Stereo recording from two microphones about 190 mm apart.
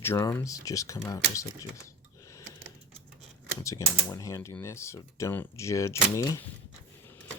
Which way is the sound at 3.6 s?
15° left (ahead or behind).